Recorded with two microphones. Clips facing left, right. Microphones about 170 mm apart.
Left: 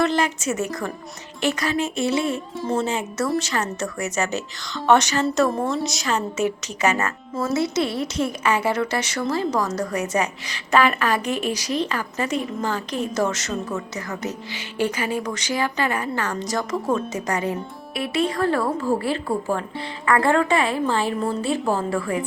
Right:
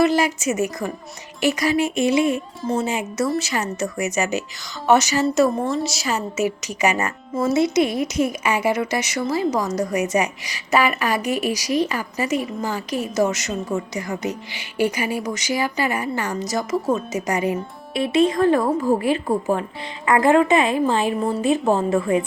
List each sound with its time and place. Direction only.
0.0 s a woman's voice: 10° right (ahead or behind)
2.6 s a woman's voice: centre (ahead or behind)
17.9 s a woman's voice: 25° right (ahead or behind)